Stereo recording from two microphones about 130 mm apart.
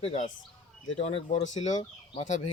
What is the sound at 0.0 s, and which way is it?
Speech, 65° left (ahead or behind).